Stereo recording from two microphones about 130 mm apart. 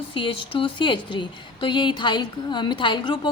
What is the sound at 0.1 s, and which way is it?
Speech, 40° left (ahead or behind).